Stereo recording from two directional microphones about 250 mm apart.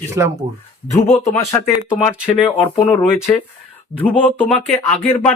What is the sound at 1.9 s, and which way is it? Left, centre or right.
Speech, centre.